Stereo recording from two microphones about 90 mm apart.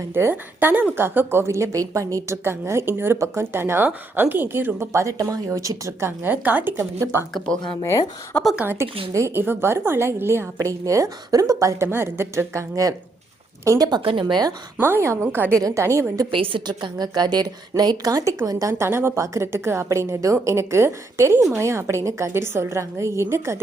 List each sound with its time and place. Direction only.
0.1 s a woman's voice: 25° right (ahead or behind)
6.1 s a woman's voice: 20° right (ahead or behind)
7.8 s speech: 35° left (ahead or behind)
8.5 s a woman's voice: 25° right (ahead or behind); by 14.0 s 45° right (ahead or behind)
14.0 s speech: 70° right (ahead or behind); by 14.5 s 55° right (ahead or behind)
15.0 s a woman's voice: 30° right (ahead or behind)
15.5 s a woman's voice: 35° right (ahead or behind)
16.3 s a woman's voice: 75° right (ahead or behind); by 23.6 s 30° right (ahead or behind)